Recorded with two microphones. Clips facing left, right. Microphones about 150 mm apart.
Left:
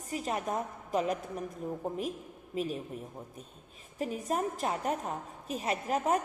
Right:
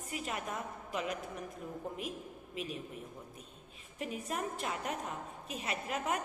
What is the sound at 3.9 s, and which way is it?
A woman's voice, 35° left (ahead or behind).